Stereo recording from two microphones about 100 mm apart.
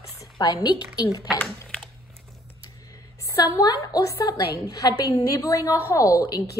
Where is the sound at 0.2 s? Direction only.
40° left (ahead or behind).